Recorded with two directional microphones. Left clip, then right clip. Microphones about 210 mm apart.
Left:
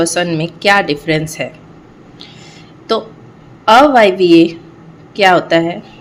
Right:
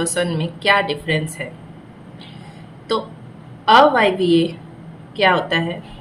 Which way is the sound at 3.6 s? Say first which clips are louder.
Left 5 dB; 35° left (ahead or behind).